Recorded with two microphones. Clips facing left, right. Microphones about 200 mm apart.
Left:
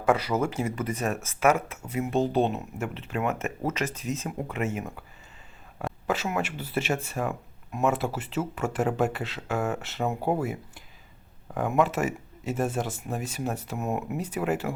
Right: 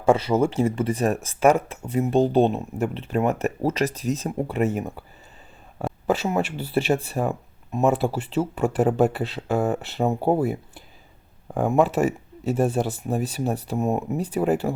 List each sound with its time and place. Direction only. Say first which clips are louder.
0.0 s speech: right 5 dB; 25° right (ahead or behind)
6.1 s speech: right 6 dB; 30° right (ahead or behind)